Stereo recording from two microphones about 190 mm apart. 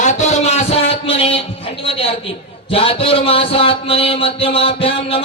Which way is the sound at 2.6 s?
30° left (ahead or behind).